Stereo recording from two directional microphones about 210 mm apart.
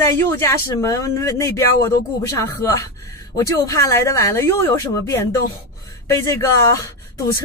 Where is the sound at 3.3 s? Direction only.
15° left (ahead or behind).